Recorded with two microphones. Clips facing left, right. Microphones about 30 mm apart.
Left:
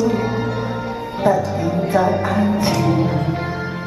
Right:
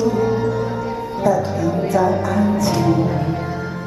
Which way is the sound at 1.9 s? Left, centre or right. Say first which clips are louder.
Left 1 dB; left.